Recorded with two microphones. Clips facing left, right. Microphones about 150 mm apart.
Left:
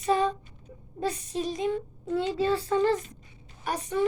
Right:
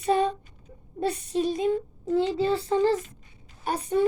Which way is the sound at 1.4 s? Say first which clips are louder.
Right 4 dB; 30° right (ahead or behind).